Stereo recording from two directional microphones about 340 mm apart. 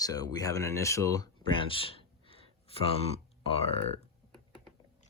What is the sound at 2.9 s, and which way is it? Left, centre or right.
Speech, centre.